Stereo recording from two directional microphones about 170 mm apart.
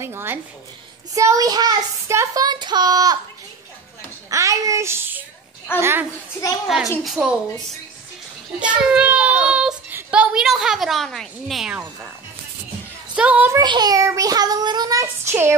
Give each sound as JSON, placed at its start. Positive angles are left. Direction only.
{"t": 0.0, "sound": "a child's voice", "side_deg": -15}
{"t": 1.1, "sound": "child singing", "side_deg": -20}
{"t": 4.3, "sound": "a child's voice", "side_deg": -20}
{"t": 7.1, "sound": "a woman's voice", "side_deg": 0}
{"t": 8.5, "sound": "a child's voice", "side_deg": -5}
{"t": 13.1, "sound": "a child's voice", "side_deg": -5}
{"t": 13.6, "sound": "child singing", "side_deg": -25}